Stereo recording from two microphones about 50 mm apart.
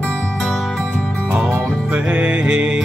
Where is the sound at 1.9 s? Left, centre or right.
Right.